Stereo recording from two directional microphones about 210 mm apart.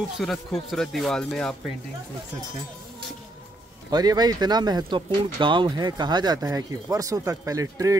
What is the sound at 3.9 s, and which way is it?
Speech, 20° right (ahead or behind).